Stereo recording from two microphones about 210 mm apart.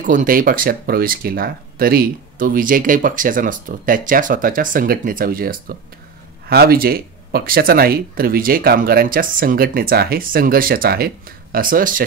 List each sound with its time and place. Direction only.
0.0 s speech: 40° right (ahead or behind)